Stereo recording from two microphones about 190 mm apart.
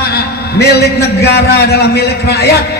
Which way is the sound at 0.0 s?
55° left (ahead or behind).